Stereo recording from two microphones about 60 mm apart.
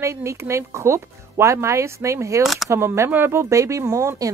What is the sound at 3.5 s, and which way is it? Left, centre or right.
Speech, right.